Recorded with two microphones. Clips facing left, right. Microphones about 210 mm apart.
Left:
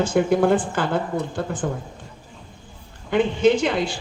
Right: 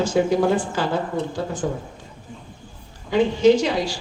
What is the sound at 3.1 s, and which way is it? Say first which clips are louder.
Speech: right 2 dB; 55° left (ahead or behind).